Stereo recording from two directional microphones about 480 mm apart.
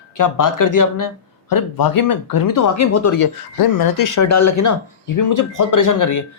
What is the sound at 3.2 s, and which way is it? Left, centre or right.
Speech, left.